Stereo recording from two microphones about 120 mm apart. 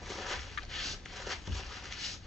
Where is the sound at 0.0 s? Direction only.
Centre (ahead or behind).